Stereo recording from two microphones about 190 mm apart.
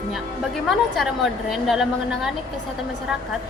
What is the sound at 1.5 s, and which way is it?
Speech, centre (ahead or behind).